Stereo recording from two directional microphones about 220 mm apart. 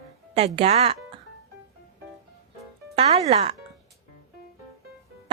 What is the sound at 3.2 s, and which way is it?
Speech, 30° right (ahead or behind).